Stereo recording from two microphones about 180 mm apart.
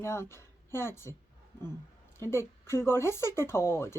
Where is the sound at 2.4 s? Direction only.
15° left (ahead or behind).